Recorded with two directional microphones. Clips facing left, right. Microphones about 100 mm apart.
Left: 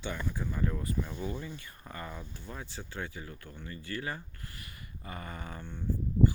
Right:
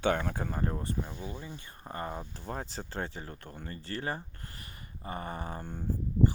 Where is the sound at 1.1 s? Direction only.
20° right (ahead or behind).